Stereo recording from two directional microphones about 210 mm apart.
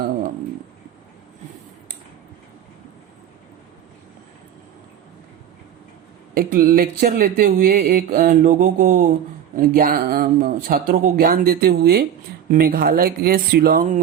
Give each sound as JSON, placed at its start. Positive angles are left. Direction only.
{"t": 6.3, "sound": "speech", "side_deg": -45}